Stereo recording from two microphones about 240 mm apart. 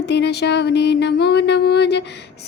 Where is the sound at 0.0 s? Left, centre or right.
Left.